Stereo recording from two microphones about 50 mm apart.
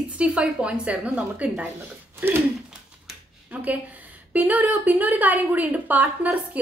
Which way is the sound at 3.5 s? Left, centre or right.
Right.